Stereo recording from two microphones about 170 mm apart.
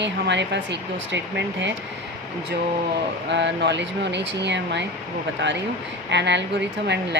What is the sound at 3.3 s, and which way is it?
Speech, 90° right.